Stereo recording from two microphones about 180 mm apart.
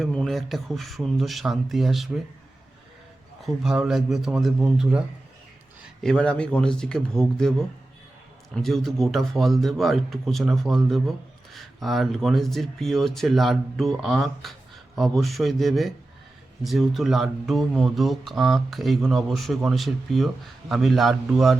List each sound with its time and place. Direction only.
0.0 s speech: centre (ahead or behind)
3.4 s speech: centre (ahead or behind)
8.5 s speech: centre (ahead or behind)